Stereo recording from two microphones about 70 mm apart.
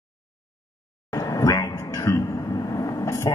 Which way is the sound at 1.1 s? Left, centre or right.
Left.